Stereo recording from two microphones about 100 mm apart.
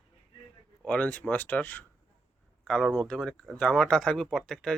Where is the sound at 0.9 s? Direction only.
10° left (ahead or behind).